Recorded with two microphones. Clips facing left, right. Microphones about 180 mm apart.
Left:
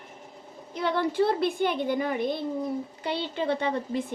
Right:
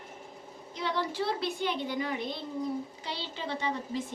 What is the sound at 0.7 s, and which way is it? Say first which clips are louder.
A woman's voice: left 7 dB; 55° left (ahead or behind).